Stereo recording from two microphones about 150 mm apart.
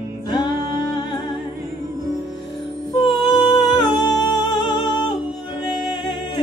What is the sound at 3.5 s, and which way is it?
Music, 30° left (ahead or behind).